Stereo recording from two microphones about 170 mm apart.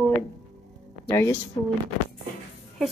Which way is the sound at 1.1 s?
15° left (ahead or behind).